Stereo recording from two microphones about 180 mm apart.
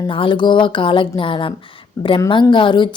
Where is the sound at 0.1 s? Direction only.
30° left (ahead or behind).